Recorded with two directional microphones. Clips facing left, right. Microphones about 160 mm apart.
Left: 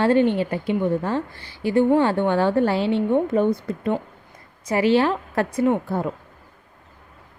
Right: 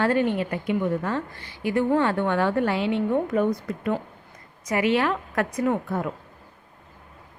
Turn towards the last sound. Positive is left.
turn(degrees=30)  # may be behind; listen again after turning